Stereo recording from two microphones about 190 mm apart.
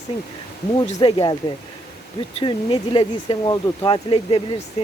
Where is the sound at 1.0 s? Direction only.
25° left (ahead or behind).